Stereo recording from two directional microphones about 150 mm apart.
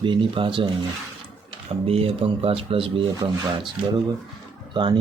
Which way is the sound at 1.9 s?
40° right (ahead or behind).